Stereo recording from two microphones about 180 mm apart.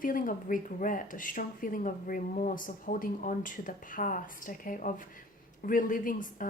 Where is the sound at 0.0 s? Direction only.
50° left (ahead or behind).